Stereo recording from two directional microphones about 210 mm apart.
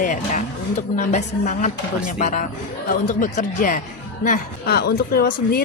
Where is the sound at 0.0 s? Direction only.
40° left (ahead or behind).